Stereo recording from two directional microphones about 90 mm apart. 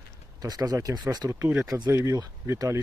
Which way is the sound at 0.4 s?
45° right (ahead or behind).